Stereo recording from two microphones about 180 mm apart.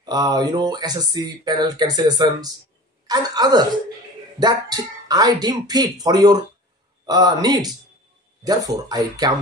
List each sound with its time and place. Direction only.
0.0 s speech: 20° right (ahead or behind)